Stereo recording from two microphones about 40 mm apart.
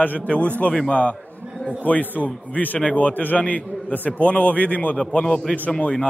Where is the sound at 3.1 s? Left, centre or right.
Left.